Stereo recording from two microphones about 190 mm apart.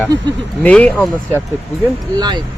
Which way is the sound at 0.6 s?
5° left (ahead or behind).